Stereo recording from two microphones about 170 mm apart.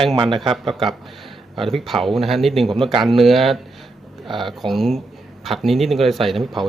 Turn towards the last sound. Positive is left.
turn(degrees=0)  # may be behind; listen again after turning